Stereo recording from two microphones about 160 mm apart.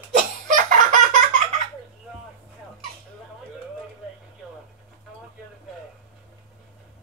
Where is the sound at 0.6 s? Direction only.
55° right (ahead or behind).